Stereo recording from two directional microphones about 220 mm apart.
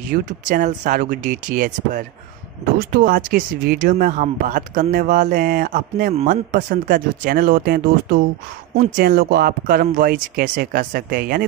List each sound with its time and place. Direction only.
0.1 s speech: 35° right (ahead or behind)